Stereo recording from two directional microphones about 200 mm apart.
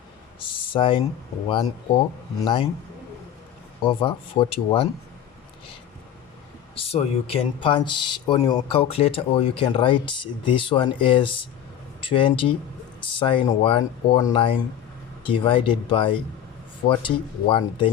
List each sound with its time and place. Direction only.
0.3 s a sound: 25° left (ahead or behind)
2.4 s speech: 25° left (ahead or behind)
3.8 s speech: 25° left (ahead or behind)
6.7 s speech: 30° left (ahead or behind)